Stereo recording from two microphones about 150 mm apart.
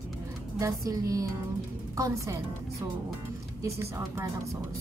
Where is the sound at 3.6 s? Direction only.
20° right (ahead or behind).